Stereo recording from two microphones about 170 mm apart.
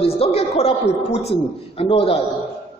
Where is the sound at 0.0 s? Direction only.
35° left (ahead or behind).